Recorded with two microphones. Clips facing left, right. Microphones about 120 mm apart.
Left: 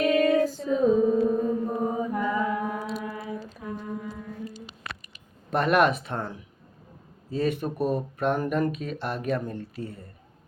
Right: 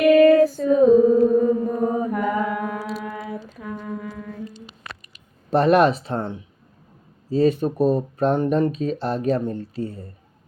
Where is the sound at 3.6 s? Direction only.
90° right.